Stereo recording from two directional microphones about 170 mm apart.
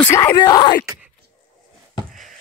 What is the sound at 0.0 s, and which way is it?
Speech, 15° left (ahead or behind).